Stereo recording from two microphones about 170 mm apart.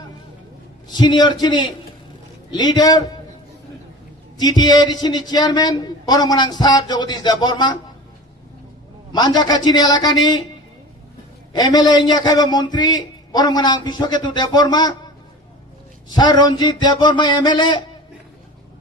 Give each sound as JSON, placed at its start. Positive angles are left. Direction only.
{"t": 0.9, "sound": "a man's voice", "side_deg": 25}
{"t": 4.4, "sound": "a man's voice", "side_deg": 25}
{"t": 9.1, "sound": "a man's voice", "side_deg": 25}
{"t": 11.5, "sound": "a man's voice", "side_deg": 25}